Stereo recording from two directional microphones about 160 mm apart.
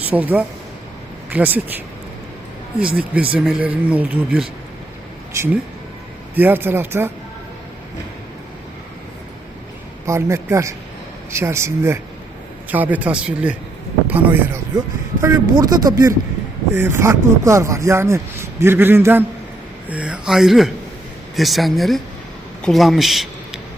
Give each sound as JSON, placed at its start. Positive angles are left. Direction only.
{"t": 0.0, "sound": "speech", "side_deg": -10}
{"t": 2.8, "sound": "speech", "side_deg": -5}
{"t": 10.1, "sound": "a man's voice", "side_deg": -15}